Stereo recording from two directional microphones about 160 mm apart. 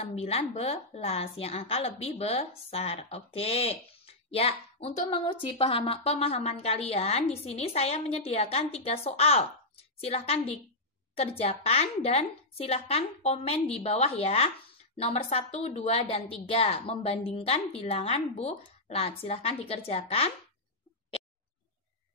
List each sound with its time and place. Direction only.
0.1 s a woman's voice: 40° left (ahead or behind)